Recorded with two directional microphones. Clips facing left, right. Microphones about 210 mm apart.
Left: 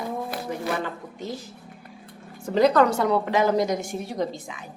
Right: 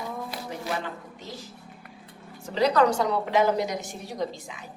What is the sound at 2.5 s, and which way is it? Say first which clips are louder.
Speech: left 3 dB; 50° left (ahead or behind).